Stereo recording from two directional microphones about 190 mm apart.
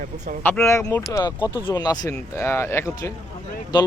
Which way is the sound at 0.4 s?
10° left (ahead or behind).